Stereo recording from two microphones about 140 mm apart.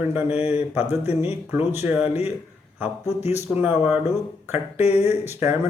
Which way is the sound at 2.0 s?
50° left (ahead or behind).